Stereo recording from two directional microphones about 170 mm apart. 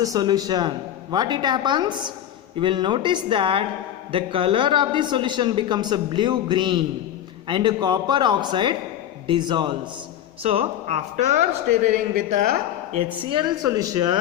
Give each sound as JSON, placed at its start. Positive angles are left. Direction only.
{"t": 0.0, "sound": "a man's voice", "side_deg": -20}
{"t": 10.4, "sound": "speech", "side_deg": -35}
{"t": 13.3, "sound": "a man's voice", "side_deg": -20}